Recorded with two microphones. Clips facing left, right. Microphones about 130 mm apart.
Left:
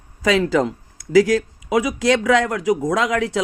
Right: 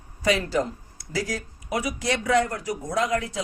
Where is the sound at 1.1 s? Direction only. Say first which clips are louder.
Left 15 dB; 90° left.